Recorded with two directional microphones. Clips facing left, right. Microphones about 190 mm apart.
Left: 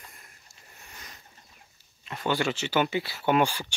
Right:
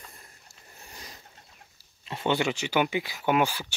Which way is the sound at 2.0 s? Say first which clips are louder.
Right 1 dB; 25° right (ahead or behind).